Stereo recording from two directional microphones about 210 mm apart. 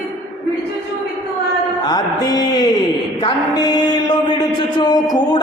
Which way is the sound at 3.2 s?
20° left (ahead or behind).